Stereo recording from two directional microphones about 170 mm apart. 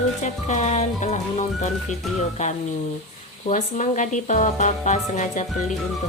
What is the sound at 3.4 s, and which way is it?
Speech, 45° left (ahead or behind).